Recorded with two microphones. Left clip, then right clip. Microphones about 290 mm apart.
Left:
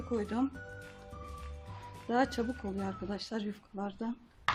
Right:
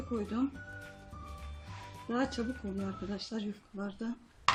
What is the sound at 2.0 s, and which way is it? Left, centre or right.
Speech, left.